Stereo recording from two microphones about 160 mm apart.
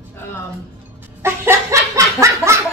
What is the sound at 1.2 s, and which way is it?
Laughter, 15° right (ahead or behind).